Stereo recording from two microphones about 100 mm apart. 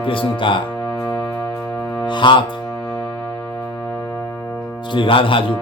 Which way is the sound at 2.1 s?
50° left (ahead or behind).